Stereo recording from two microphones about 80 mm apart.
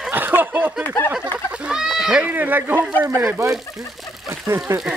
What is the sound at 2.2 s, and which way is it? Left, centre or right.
Speech, right.